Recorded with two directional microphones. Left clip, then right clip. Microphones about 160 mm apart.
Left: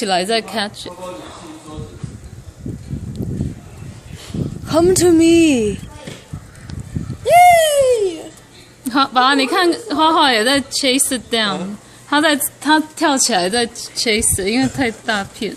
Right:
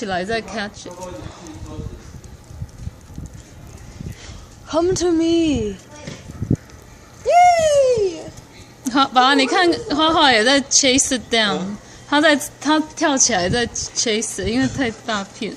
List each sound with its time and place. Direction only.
0.0 s a woman's voice: 25° left (ahead or behind)
4.6 s a woman's voice: 60° left (ahead or behind)
7.3 s a sound: 60° left (ahead or behind)
8.8 s a woman's voice: 5° left (ahead or behind)